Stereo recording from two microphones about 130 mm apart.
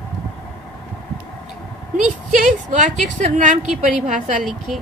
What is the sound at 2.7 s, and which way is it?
A woman's voice, 80° right.